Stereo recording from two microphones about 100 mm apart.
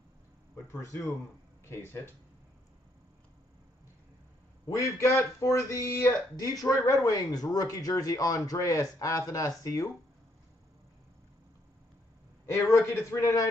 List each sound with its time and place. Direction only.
4.6 s speech: 30° left (ahead or behind)
12.7 s speech: 30° left (ahead or behind)